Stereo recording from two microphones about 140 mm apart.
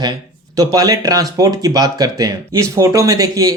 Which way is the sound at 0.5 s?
25° right (ahead or behind).